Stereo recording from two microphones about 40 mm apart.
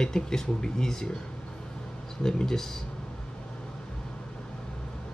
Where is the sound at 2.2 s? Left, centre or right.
Centre.